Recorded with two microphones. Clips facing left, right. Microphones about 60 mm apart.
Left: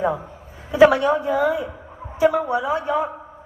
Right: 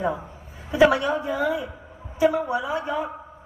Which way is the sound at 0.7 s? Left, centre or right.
Left.